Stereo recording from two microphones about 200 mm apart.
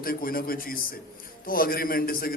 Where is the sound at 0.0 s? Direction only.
45° left (ahead or behind).